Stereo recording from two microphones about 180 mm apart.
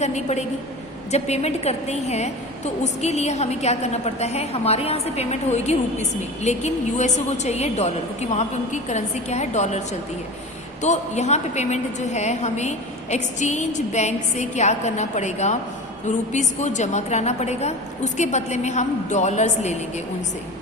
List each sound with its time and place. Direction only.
0.0 s a woman's voice: 40° left (ahead or behind)
10.8 s a woman's voice: 40° left (ahead or behind)